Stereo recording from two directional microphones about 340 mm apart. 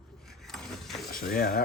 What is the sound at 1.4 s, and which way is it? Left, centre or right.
Speech, left.